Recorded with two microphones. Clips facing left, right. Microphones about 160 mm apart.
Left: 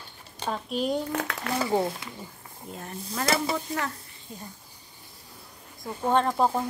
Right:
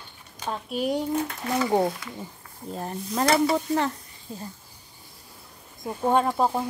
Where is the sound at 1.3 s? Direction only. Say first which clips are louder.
Left 3 dB; 75° left (ahead or behind).